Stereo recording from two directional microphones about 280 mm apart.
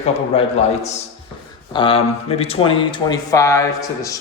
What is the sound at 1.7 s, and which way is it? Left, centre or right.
Mantra, centre.